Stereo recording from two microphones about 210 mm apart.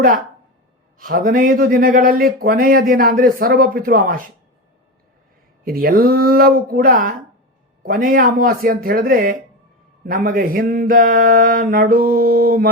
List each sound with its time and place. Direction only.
0.9 s speech: 40° right (ahead or behind)
5.6 s speech: 45° right (ahead or behind)